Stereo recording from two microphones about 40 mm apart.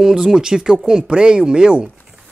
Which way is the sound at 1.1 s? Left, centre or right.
Right.